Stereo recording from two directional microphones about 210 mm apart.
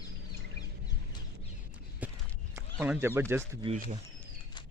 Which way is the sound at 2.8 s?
10° right (ahead or behind).